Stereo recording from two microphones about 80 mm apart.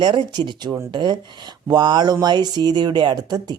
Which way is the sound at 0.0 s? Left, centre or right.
Right.